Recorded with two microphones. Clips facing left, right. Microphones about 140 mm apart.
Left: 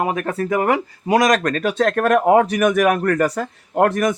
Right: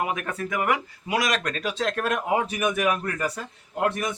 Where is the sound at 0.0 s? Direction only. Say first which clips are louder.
Left 7 dB; 40° left (ahead or behind).